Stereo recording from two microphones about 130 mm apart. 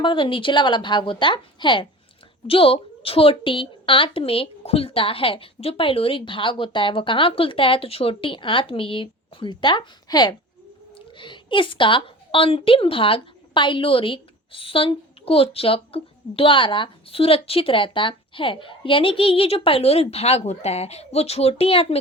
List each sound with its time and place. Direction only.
0.0 s a woman's voice: 40° left (ahead or behind)